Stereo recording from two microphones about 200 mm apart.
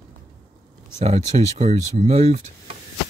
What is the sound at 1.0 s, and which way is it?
Speech, 35° right (ahead or behind).